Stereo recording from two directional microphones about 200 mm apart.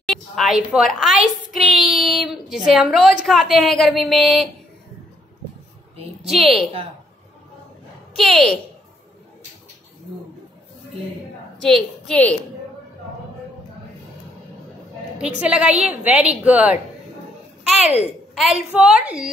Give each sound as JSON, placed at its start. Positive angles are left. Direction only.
{"t": 0.0, "sound": "speech", "side_deg": 0}
{"t": 6.2, "sound": "speech", "side_deg": 0}
{"t": 8.2, "sound": "speech", "side_deg": 0}
{"t": 11.6, "sound": "speech", "side_deg": 5}
{"t": 15.4, "sound": "a woman's voice", "side_deg": -5}
{"t": 18.3, "sound": "speech", "side_deg": -5}